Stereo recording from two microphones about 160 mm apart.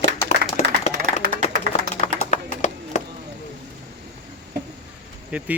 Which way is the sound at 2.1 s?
45° left (ahead or behind).